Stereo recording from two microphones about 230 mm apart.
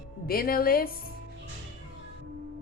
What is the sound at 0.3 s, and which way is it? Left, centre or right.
Speech, left.